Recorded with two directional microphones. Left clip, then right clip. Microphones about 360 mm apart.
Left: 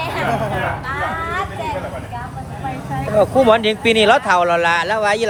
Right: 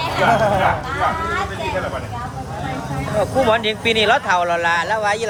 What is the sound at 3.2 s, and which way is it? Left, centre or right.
Speech, centre.